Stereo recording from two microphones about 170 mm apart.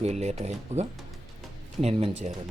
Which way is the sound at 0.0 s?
40° right (ahead or behind).